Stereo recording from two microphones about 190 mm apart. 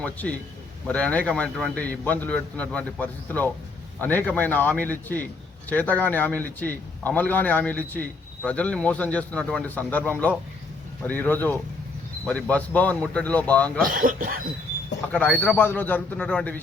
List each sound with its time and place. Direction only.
0.0 s a man's voice: 5° left (ahead or behind)
13.8 s speech: 45° right (ahead or behind)
15.1 s a man's voice: 10° left (ahead or behind)